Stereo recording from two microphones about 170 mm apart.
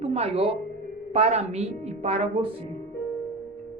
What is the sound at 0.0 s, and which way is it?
A woman's voice, 35° right (ahead or behind).